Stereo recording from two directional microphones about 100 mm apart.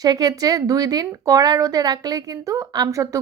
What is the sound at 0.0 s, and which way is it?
A woman's voice, 40° right (ahead or behind).